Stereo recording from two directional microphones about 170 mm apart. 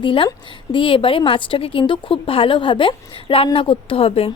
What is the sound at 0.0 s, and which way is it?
A woman's voice, 30° left (ahead or behind).